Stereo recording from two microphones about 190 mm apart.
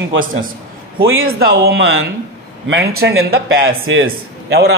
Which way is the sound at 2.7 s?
75° right (ahead or behind).